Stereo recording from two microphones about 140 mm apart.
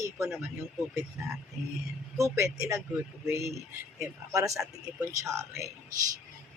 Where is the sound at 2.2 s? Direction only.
20° right (ahead or behind).